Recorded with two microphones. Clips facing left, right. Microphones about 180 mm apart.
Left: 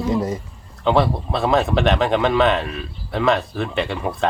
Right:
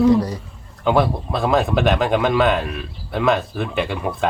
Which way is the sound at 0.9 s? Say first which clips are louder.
Even; centre (ahead or behind).